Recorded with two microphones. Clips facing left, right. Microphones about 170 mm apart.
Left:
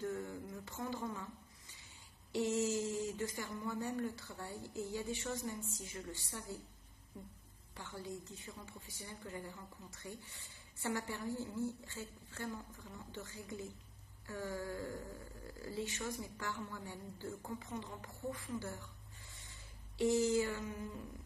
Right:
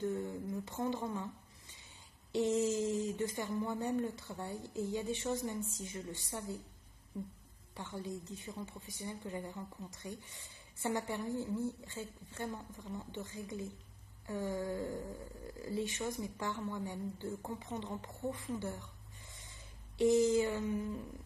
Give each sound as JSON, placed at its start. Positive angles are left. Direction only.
{"t": 0.0, "sound": "a sound", "side_deg": -20}
{"t": 2.3, "sound": "a woman's voice", "side_deg": -20}
{"t": 7.7, "sound": "a woman's voice", "side_deg": -20}
{"t": 20.0, "sound": "a woman's voice", "side_deg": -20}